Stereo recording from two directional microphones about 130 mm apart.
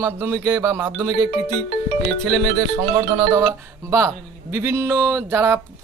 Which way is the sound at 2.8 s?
25° right (ahead or behind).